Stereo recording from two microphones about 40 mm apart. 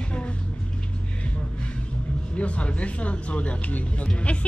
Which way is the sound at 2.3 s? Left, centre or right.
Left.